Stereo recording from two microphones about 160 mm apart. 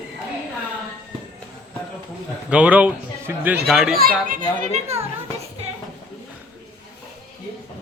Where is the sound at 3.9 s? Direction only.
60° right (ahead or behind).